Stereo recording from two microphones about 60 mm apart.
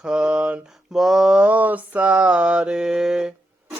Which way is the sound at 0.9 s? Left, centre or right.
Centre.